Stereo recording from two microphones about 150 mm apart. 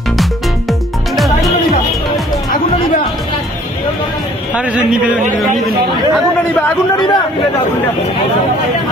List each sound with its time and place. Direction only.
0.2 s music: centre (ahead or behind)
7.0 s speech: 30° left (ahead or behind)